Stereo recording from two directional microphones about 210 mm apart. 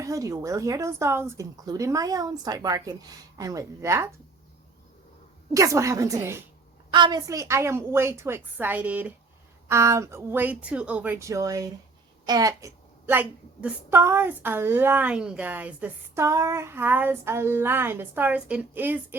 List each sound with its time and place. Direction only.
0.0 s a woman's voice: 15° right (ahead or behind)
5.5 s a woman's voice: 15° right (ahead or behind)